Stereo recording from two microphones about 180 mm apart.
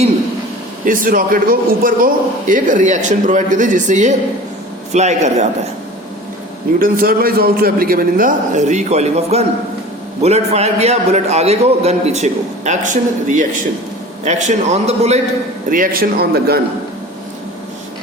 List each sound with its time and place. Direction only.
0.9 s a man's voice: 50° right (ahead or behind)
6.7 s a man's voice: 55° right (ahead or behind); by 15.2 s 35° right (ahead or behind)
15.7 s a man's voice: 50° right (ahead or behind)